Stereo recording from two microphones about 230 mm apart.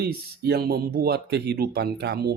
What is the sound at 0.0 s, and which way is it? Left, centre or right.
Speech, right.